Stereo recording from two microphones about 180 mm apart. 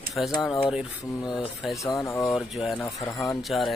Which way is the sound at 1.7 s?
15° left (ahead or behind).